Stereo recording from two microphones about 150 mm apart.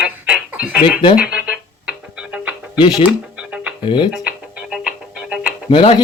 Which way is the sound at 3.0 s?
5° right (ahead or behind).